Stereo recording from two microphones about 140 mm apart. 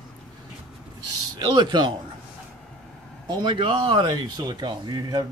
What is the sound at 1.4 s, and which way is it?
Speech, 30° right (ahead or behind).